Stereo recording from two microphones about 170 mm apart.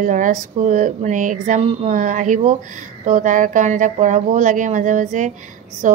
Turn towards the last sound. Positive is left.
turn(degrees=-45)  # may be behind; listen again after turning